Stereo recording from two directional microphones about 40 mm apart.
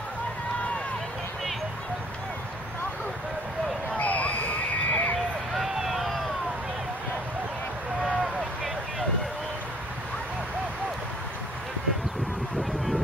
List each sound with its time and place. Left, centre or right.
3.9 s a sound: left
4.8 s horse: left
5.6 s vehicle: centre